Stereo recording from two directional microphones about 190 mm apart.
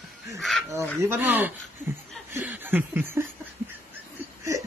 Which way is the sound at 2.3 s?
10° right (ahead or behind).